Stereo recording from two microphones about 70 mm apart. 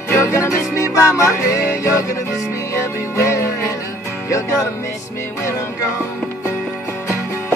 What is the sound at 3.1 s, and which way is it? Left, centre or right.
Music, left.